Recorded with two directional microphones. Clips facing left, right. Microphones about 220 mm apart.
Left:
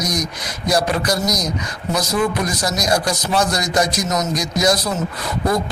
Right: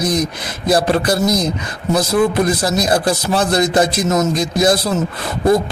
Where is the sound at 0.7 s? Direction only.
30° right (ahead or behind).